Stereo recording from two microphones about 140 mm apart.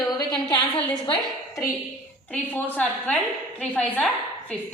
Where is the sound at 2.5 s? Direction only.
10° left (ahead or behind).